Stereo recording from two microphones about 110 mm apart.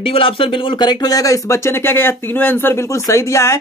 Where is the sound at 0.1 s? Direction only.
55° left (ahead or behind).